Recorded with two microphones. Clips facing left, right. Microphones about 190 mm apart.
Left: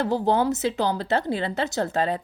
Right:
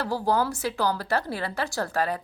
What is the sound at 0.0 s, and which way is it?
A woman's voice, 20° left (ahead or behind).